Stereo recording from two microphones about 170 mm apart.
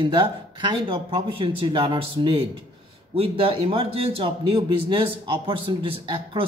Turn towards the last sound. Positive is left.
turn(degrees=-30)  # may be behind; listen again after turning